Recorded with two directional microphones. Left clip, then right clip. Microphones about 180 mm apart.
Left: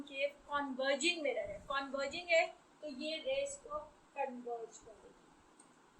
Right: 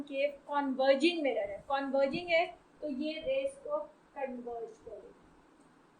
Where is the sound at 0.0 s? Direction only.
20° right (ahead or behind).